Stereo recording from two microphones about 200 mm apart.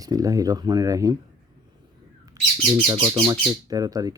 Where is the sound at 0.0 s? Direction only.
20° right (ahead or behind).